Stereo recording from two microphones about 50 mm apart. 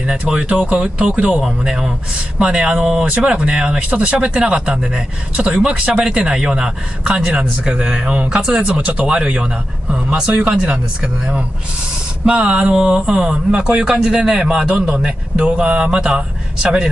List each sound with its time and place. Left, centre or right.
0.3 s a man's voice: centre